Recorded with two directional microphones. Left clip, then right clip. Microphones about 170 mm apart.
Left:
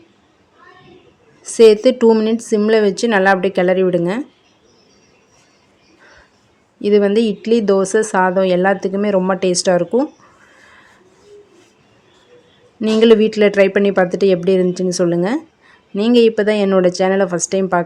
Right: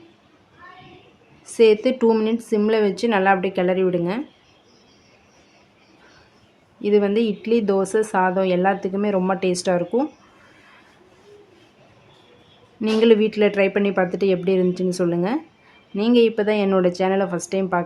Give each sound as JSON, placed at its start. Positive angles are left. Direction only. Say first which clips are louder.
{"t": 1.5, "sound": "speech", "louder": "left 7 dB", "side_deg": 30}
{"t": 6.8, "sound": "speech", "louder": "left 5 dB", "side_deg": 30}
{"t": 12.8, "sound": "speech", "louder": "left 5 dB", "side_deg": 25}